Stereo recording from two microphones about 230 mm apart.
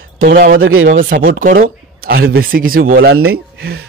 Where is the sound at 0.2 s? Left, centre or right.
Right.